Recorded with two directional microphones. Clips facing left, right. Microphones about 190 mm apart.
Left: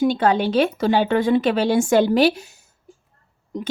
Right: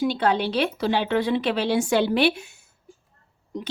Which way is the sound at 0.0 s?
45° left (ahead or behind).